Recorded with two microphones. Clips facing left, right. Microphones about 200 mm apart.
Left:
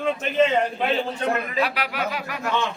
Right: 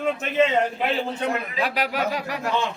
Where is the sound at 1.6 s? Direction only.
45° right (ahead or behind).